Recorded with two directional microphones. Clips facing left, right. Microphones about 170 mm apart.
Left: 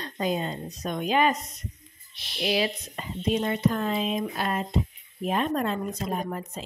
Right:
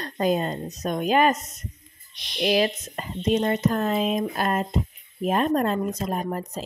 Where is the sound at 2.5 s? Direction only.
45° right (ahead or behind).